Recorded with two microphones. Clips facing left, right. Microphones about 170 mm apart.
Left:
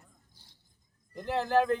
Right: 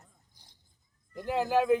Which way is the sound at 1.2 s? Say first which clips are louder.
Right 1 dB; 10° right (ahead or behind).